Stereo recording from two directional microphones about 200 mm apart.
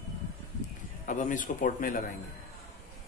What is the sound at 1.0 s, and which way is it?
Speech, 40° left (ahead or behind).